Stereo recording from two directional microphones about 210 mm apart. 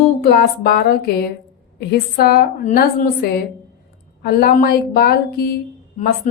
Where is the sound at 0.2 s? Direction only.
45° left (ahead or behind).